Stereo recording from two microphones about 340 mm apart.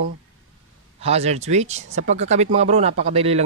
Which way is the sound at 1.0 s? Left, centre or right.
Centre.